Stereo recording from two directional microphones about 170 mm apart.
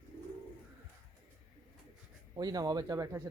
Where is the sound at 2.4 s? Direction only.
20° right (ahead or behind).